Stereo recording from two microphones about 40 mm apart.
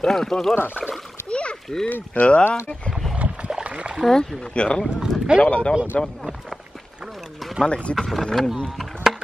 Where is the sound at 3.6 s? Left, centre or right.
Right.